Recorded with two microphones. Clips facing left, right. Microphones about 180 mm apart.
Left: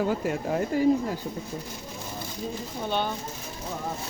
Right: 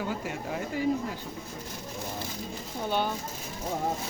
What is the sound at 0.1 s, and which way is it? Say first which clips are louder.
Speech: left 6 dB; 45° left (ahead or behind).